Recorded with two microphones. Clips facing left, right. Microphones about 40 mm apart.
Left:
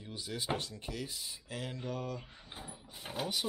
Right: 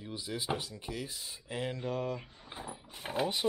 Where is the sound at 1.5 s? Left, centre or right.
Right.